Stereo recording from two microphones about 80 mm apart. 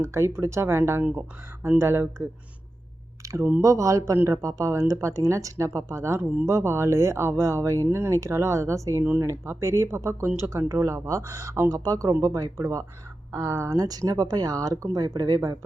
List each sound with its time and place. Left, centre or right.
0.0 s speech: right
3.2 s speech: right
13.7 s speech: right